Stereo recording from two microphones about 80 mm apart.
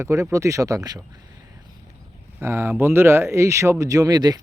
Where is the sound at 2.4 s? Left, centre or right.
Right.